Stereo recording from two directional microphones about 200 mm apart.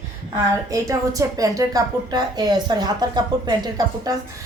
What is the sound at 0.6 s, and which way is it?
A woman's voice, 15° right (ahead or behind).